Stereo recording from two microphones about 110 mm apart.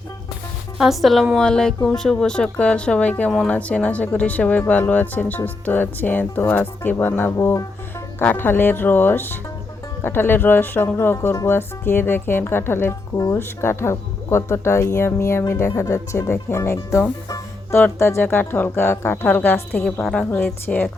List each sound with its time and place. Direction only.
0.8 s a woman's voice: centre (ahead or behind); by 7.7 s 25° left (ahead or behind)
8.2 s speech: 15° left (ahead or behind)
19.8 s a woman's voice: 5° left (ahead or behind)
20.3 s speech: 15° left (ahead or behind)